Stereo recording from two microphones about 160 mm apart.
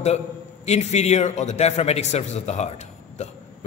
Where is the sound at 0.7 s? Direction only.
45° left (ahead or behind).